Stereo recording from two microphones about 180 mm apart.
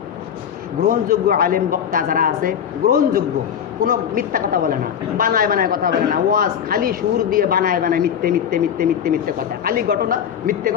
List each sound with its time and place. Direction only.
0.9 s speech: 55° right (ahead or behind)